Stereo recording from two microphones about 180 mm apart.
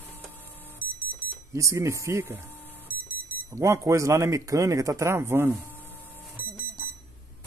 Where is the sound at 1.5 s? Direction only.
15° right (ahead or behind).